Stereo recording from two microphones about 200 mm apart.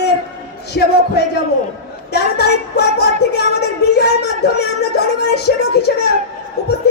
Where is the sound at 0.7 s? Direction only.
55° left (ahead or behind).